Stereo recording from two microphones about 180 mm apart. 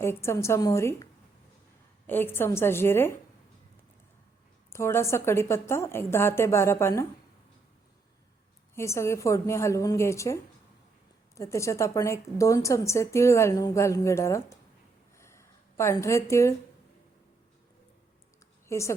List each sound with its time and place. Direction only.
0.0 s a woman's voice: 15° left (ahead or behind)
2.0 s a woman's voice: 10° left (ahead or behind)
4.7 s a woman's voice: 15° left (ahead or behind)
8.7 s a woman's voice: 15° left (ahead or behind)
15.2 s a sound: 15° left (ahead or behind)
18.7 s a woman's voice: 15° left (ahead or behind)